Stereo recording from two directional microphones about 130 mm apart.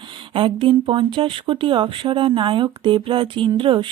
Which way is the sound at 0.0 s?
40° right (ahead or behind).